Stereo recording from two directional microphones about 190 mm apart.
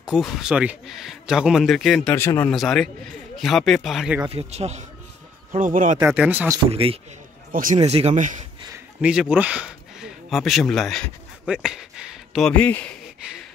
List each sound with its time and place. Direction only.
0.0 s a man's voice: 5° right (ahead or behind)
2.5 s a man's voice: centre (ahead or behind)
4.3 s speech: 30° right (ahead or behind)
5.9 s speech: 10° right (ahead or behind)
6.6 s speech: 30° right (ahead or behind)
9.0 s speech: 5° right (ahead or behind)